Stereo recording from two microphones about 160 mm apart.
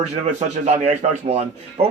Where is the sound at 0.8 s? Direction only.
40° right (ahead or behind).